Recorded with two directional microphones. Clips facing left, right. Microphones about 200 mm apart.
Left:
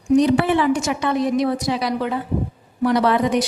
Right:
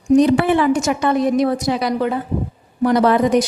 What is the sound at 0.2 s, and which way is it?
A woman's voice, 50° right (ahead or behind).